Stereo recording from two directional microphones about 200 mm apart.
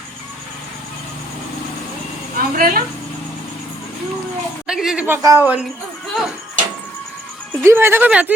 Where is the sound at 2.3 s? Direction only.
45° right (ahead or behind).